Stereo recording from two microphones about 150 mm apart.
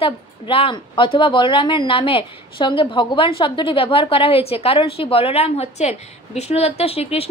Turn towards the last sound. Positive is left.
turn(degrees=40)  # may be behind; listen again after turning